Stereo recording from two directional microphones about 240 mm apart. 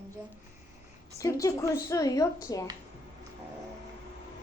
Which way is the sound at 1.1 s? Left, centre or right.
Centre.